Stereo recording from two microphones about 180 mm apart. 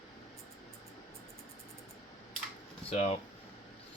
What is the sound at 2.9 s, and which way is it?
Speech, 35° left (ahead or behind).